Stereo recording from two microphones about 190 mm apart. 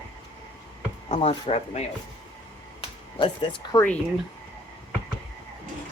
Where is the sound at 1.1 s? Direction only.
30° left (ahead or behind).